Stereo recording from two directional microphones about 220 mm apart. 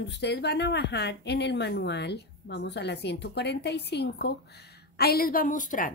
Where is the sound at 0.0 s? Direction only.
50° left (ahead or behind).